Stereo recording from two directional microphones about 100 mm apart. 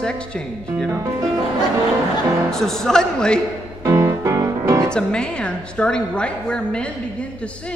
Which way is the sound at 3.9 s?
25° right (ahead or behind).